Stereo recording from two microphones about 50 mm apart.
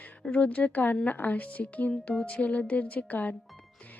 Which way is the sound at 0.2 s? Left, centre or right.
Left.